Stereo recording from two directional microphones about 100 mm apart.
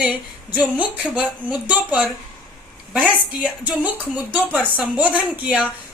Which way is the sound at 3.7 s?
10° right (ahead or behind).